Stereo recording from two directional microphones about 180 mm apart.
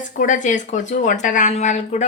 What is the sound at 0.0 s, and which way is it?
Speech, 45° left (ahead or behind).